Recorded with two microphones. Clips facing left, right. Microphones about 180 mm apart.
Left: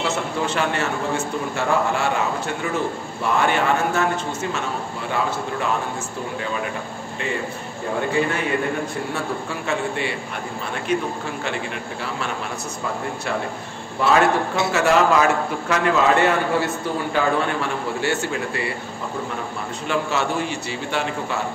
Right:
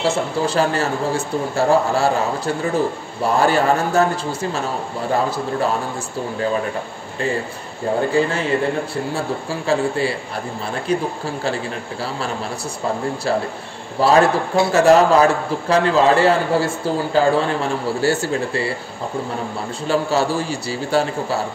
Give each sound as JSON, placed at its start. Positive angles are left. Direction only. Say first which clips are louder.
{"t": 0.0, "sound": "a man's voice", "louder": "right 4 dB", "side_deg": -35}
{"t": 8.3, "sound": "a man's voice", "louder": "right 3 dB", "side_deg": -30}
{"t": 14.0, "sound": "a man's voice", "louder": "right 3 dB", "side_deg": -35}
{"t": 19.9, "sound": "a man's voice", "louder": "right 5 dB", "side_deg": -35}